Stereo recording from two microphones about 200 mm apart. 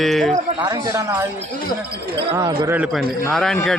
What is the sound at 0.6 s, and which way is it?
Speech, 15° right (ahead or behind).